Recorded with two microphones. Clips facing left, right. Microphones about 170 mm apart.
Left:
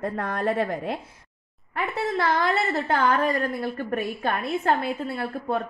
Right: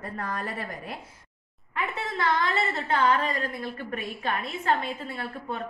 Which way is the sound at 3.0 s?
50° left (ahead or behind).